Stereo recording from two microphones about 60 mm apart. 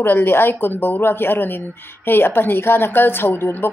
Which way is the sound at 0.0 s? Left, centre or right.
Left.